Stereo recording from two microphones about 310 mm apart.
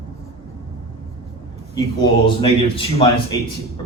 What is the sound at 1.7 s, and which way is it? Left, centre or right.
A man's voice, centre.